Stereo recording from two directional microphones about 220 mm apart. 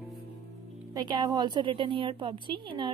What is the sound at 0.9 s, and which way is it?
A woman's voice, 20° right (ahead or behind).